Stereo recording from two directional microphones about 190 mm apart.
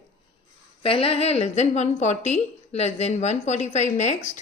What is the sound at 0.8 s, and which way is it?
A woman's voice, 30° left (ahead or behind).